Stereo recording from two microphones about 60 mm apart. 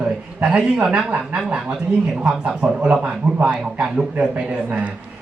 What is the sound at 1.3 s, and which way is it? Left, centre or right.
Speech, right.